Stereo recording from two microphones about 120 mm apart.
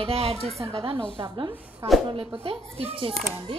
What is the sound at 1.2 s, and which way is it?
Speech, 40° right (ahead or behind).